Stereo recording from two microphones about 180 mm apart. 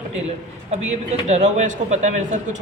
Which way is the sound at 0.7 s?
40° right (ahead or behind).